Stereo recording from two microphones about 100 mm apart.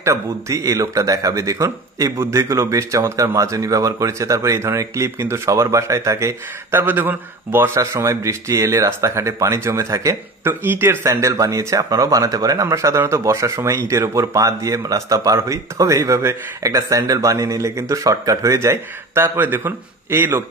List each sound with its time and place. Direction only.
0.0 s speech: 30° right (ahead or behind)